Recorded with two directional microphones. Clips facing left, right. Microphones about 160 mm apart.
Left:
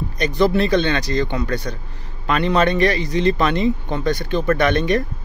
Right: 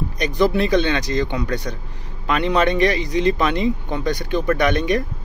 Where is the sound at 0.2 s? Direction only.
15° right (ahead or behind).